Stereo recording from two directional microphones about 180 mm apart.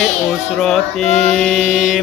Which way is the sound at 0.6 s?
Centre (ahead or behind).